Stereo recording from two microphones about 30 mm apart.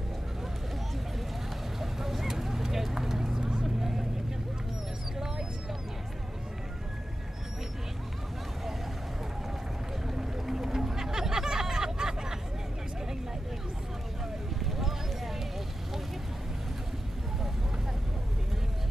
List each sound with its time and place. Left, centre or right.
1.8 s vehicle: centre
10.1 s a sound: centre
14.7 s vehicle: centre